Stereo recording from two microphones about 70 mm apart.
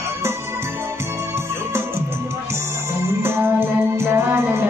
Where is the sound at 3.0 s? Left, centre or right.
Right.